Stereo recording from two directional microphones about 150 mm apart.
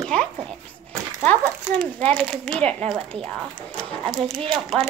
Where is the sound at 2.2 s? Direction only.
5° left (ahead or behind).